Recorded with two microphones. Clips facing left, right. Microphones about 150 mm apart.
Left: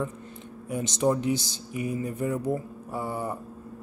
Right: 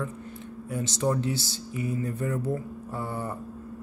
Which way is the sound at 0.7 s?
15° left (ahead or behind).